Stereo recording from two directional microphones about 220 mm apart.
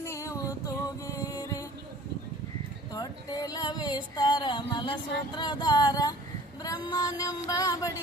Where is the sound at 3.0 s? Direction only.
20° left (ahead or behind).